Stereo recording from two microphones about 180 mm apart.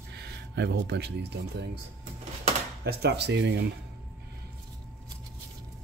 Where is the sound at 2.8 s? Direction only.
60° right (ahead or behind).